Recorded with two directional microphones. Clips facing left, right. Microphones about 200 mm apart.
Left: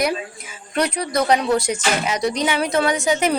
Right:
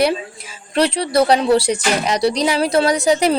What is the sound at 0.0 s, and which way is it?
A woman's voice, 30° right (ahead or behind).